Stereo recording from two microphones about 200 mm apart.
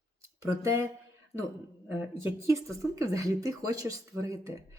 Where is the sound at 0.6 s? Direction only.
15° right (ahead or behind).